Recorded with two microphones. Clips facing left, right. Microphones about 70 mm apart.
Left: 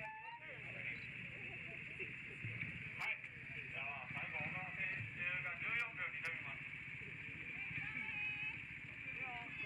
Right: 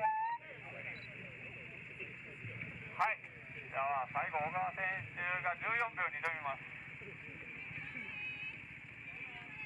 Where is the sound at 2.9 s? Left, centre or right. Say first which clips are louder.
Right 13 dB; right.